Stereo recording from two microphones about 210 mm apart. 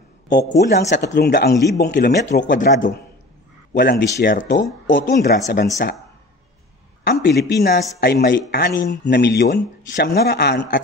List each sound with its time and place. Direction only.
0.3 s speech: 50° left (ahead or behind)
4.4 s speech: 60° left (ahead or behind)
7.2 s speech: 55° left (ahead or behind)